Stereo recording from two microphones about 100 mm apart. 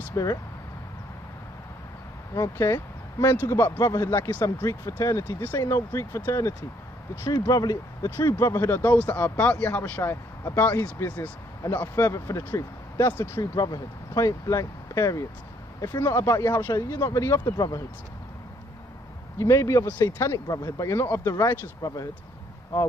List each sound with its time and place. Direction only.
0.1 s speech: 35° left (ahead or behind)
2.3 s speech: 30° left (ahead or behind)
7.2 s speech: 35° left (ahead or behind)
13.4 s speech: 40° left (ahead or behind)
19.3 s speech: 30° left (ahead or behind)
19.9 s speech: 15° left (ahead or behind)
20.2 s speech: 35° left (ahead or behind)